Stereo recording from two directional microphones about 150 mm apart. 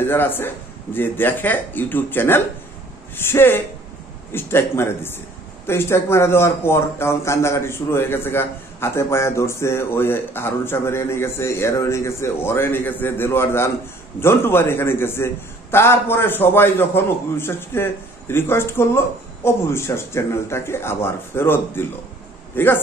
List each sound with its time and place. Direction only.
0.0 s a man's voice: 15° left (ahead or behind)